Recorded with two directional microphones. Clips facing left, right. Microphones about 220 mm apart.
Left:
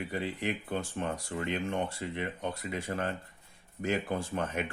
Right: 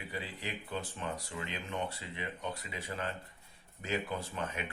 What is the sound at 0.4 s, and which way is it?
Speech, 50° left (ahead or behind).